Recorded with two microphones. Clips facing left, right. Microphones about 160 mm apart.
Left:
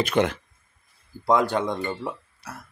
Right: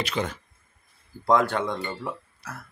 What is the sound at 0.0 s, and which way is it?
Speech, 70° left (ahead or behind).